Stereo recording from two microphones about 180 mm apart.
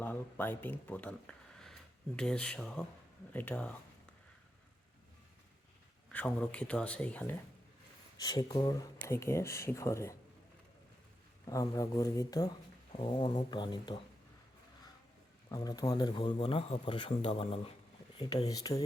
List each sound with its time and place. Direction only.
0.0 s speech: 10° left (ahead or behind)
6.1 s speech: 5° left (ahead or behind)
8.2 s speech: 20° left (ahead or behind)
11.4 s speech: 20° left (ahead or behind)
15.4 s speech: 20° left (ahead or behind)